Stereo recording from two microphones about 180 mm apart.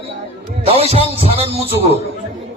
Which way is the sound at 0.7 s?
35° right (ahead or behind).